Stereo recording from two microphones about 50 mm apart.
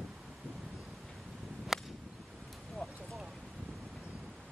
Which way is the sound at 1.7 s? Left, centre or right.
Centre.